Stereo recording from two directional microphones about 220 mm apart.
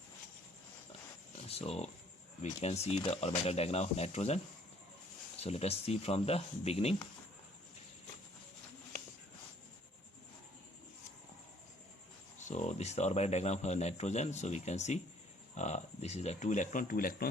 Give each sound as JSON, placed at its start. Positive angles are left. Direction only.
{"t": 1.5, "sound": "speech", "side_deg": 30}
{"t": 5.4, "sound": "speech", "side_deg": 30}
{"t": 12.5, "sound": "speech", "side_deg": 30}